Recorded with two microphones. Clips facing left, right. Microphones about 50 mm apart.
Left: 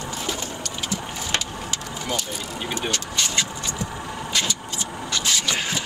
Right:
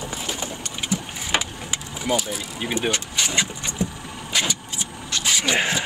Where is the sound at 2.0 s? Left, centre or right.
Centre.